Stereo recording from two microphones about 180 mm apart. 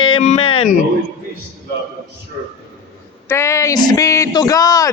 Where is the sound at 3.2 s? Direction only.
15° left (ahead or behind).